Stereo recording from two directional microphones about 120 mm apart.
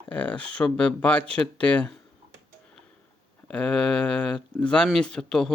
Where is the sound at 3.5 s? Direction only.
10° left (ahead or behind).